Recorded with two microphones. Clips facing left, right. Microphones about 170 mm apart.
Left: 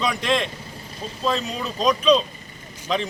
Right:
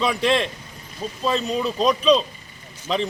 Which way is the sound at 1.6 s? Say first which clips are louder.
Even; 5° right (ahead or behind).